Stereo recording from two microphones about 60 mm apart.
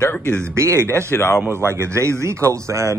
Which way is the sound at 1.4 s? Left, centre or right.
Right.